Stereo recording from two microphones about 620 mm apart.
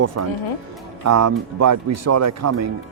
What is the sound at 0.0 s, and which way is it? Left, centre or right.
Speech, right.